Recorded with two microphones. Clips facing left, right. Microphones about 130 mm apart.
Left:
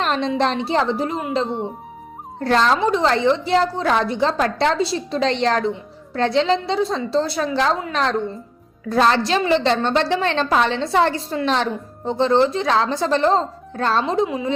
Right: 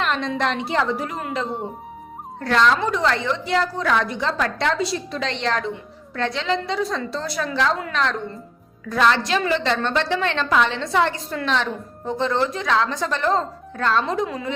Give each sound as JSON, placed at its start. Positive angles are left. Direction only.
{"t": 0.0, "sound": "a woman's voice", "side_deg": 30}
{"t": 2.4, "sound": "a woman's voice", "side_deg": 35}
{"t": 8.9, "sound": "a woman's voice", "side_deg": 35}
{"t": 14.3, "sound": "a woman's voice", "side_deg": 15}